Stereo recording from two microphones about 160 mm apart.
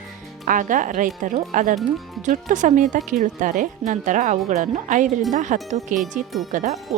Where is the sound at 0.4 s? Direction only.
55° right (ahead or behind).